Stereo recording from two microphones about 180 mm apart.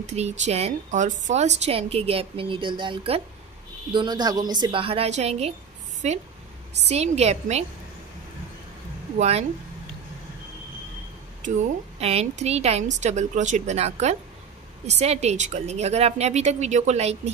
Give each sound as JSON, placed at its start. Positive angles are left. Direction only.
{"t": 0.0, "sound": "a woman's voice", "side_deg": -35}
{"t": 9.2, "sound": "a woman's voice", "side_deg": -35}
{"t": 12.0, "sound": "a woman's voice", "side_deg": -35}